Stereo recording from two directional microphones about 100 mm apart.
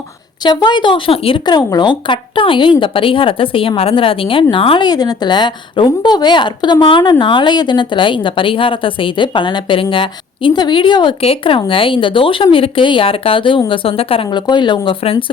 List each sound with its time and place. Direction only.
0.4 s speech: 50° left (ahead or behind); by 1.4 s 65° left (ahead or behind)
1.5 s speech: 45° left (ahead or behind); by 4.9 s 60° left (ahead or behind)
4.9 s a woman's voice: 45° left (ahead or behind)
11.2 s a woman's voice: 70° left (ahead or behind)
14.3 s a woman's voice: 45° left (ahead or behind)